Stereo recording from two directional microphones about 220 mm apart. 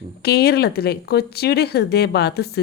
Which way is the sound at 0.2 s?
45° left (ahead or behind).